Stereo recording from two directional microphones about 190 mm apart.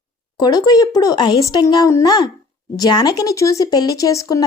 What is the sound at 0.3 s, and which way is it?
A woman's voice, 20° left (ahead or behind).